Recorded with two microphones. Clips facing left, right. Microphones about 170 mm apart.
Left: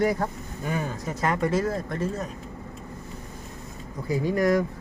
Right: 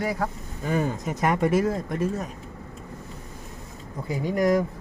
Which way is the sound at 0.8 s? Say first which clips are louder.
Right 2 dB; 20° right (ahead or behind).